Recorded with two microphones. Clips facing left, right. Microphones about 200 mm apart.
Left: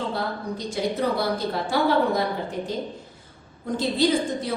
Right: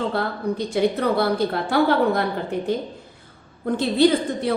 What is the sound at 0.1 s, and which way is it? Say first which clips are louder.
A woman's voice: right 4 dB; 60° right (ahead or behind).